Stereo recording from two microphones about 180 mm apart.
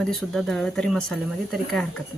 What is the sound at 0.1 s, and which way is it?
Speech, centre (ahead or behind).